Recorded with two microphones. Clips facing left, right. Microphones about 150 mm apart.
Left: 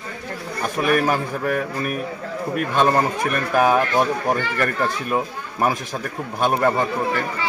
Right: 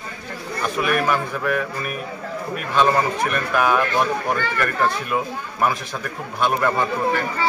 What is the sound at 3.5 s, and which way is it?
Speech, 35° left (ahead or behind).